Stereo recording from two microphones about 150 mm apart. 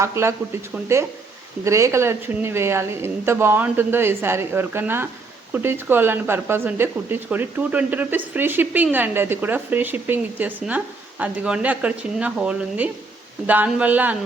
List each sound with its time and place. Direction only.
0.0 s speech: 20° right (ahead or behind)